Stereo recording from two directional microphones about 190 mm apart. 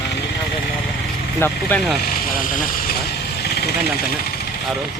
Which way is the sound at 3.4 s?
55° left (ahead or behind).